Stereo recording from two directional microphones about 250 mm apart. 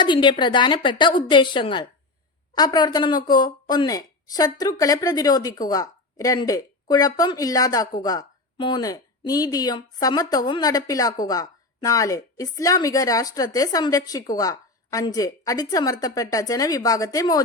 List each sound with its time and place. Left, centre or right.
0.0 s a woman's voice: centre